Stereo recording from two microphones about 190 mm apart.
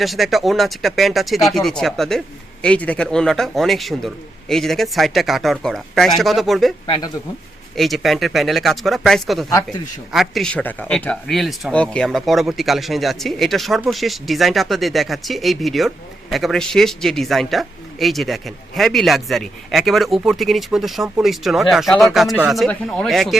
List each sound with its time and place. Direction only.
0.0 s speech: centre (ahead or behind)
6.8 s speech: 25° left (ahead or behind)
7.8 s speech: centre (ahead or behind)